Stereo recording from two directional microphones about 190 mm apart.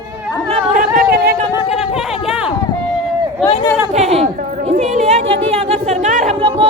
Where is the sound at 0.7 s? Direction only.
45° right (ahead or behind).